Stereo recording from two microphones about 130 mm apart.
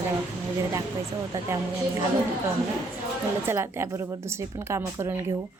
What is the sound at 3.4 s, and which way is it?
A woman's voice, 20° right (ahead or behind).